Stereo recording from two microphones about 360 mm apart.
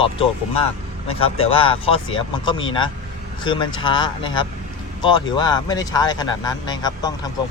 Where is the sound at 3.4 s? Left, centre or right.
Centre.